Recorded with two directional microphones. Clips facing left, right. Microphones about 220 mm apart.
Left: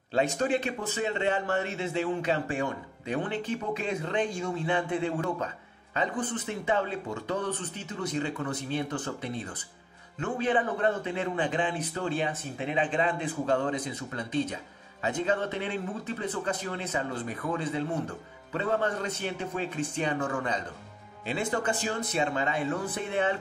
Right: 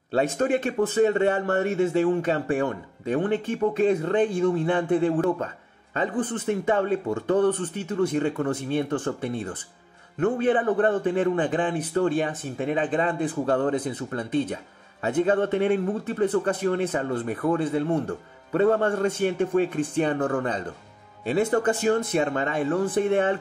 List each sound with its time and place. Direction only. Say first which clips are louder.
0.4 s speech: right 6 dB; 50° right (ahead or behind)